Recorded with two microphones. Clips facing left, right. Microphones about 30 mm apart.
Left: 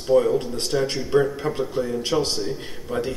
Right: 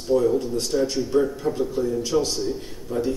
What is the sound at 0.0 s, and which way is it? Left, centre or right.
A man's voice, left.